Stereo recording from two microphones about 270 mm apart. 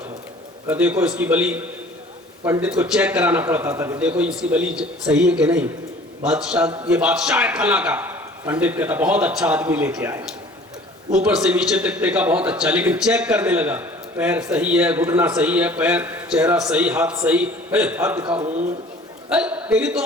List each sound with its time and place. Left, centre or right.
0.7 s a man's voice: centre
18.3 s speech: right
19.3 s a man's voice: centre